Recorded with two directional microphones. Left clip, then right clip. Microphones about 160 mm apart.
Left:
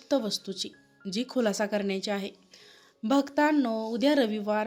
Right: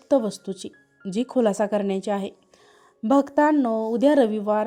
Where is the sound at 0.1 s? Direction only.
45° right (ahead or behind).